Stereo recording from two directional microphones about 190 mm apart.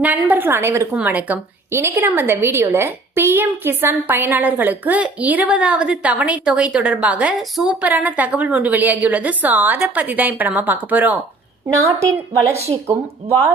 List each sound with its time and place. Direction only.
0.0 s a woman's voice: 10° right (ahead or behind)